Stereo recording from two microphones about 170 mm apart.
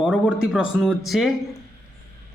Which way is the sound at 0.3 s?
5° right (ahead or behind).